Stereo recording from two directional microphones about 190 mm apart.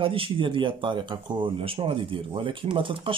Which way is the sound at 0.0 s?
30° right (ahead or behind).